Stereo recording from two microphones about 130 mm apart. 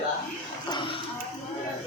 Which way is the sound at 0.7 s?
40° left (ahead or behind).